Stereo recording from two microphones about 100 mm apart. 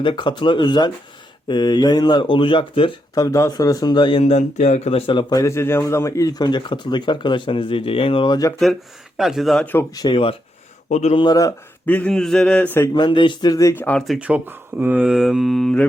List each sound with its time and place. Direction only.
0.0 s speech: 55° left (ahead or behind)
3.2 s speech: 30° left (ahead or behind); by 4.2 s 50° left (ahead or behind)
4.2 s speech: 90° left
5.3 s a man's voice: 30° left (ahead or behind); by 8.3 s 65° left (ahead or behind)
8.3 s speech: 35° left (ahead or behind)
9.1 s speech: centre (ahead or behind)
9.9 s speech: 45° left (ahead or behind)
11.9 s speech: 15° left (ahead or behind)
12.1 s speech: 5° left (ahead or behind)
12.9 s speech: 50° left (ahead or behind)
13.5 s speech: 35° left (ahead or behind)
13.7 s speech: 15° left (ahead or behind)
14.2 s speech: 15° right (ahead or behind); by 15.9 s 5° left (ahead or behind)